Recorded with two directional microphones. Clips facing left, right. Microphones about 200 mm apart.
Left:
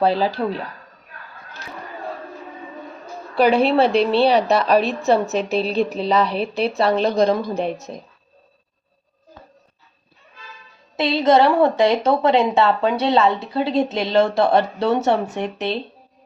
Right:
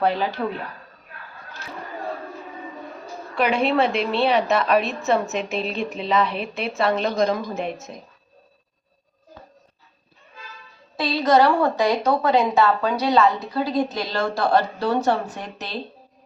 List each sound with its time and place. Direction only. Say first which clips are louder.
0.0 s a woman's voice: left 4 dB; 30° left (ahead or behind)
3.3 s a woman's voice: left 5 dB; 35° left (ahead or behind)
10.9 s a woman's voice: left 3 dB; 25° left (ahead or behind)